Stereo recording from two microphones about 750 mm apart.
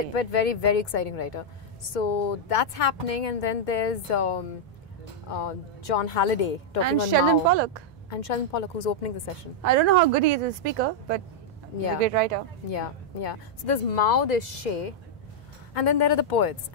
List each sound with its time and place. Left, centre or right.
0.1 s a woman's voice: left
6.9 s a woman's voice: right
8.1 s speech: left
9.6 s a woman's voice: right
12.6 s speech: left